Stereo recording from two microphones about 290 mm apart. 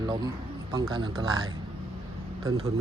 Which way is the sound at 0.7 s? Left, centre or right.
Centre.